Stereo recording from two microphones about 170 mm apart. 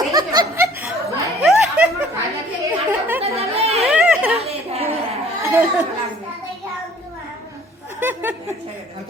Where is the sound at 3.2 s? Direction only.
35° right (ahead or behind).